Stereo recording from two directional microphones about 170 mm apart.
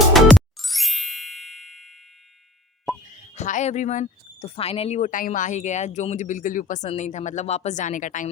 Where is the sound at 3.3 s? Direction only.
45° left (ahead or behind).